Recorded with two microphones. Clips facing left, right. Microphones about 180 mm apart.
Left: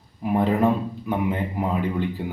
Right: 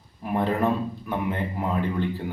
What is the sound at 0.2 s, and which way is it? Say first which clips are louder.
A man's voice: left 4 dB; 10° left (ahead or behind).